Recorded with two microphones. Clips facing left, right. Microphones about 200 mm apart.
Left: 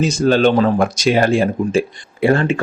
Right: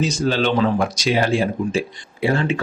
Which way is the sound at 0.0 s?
50° left (ahead or behind).